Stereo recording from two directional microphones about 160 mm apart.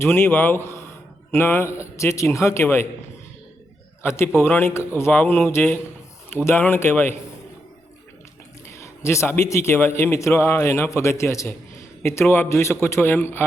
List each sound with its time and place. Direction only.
0.0 s speech: 15° left (ahead or behind)
4.0 s speech: 15° left (ahead or behind)
8.8 s speech: 15° left (ahead or behind)